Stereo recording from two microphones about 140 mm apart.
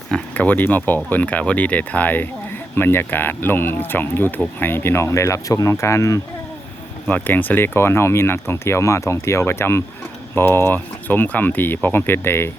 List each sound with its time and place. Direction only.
0.1 s speech: 10° left (ahead or behind)